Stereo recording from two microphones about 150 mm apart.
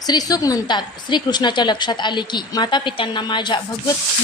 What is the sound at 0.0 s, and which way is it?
A woman's voice, 25° left (ahead or behind).